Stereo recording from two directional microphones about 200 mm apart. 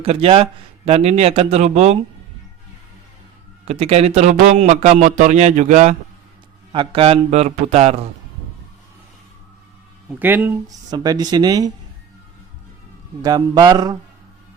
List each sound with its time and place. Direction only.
0.0 s a man's voice: 30° right (ahead or behind)
3.7 s a man's voice: 30° right (ahead or behind)
10.1 s speech: 10° right (ahead or behind)
13.2 s speech: 20° right (ahead or behind)